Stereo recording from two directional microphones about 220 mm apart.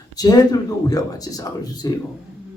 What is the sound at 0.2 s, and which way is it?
Speech, 15° left (ahead or behind).